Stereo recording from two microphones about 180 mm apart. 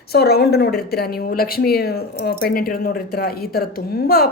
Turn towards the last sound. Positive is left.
turn(degrees=55)  # may be behind; listen again after turning